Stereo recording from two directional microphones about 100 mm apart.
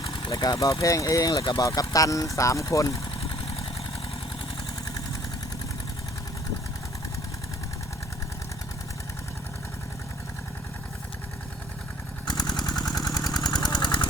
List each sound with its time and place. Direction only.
0.0 s vehicle: 65° left (ahead or behind)
0.3 s speech: 40° left (ahead or behind)
12.5 s engine: 40° left (ahead or behind)
12.9 s vehicle: 40° left (ahead or behind)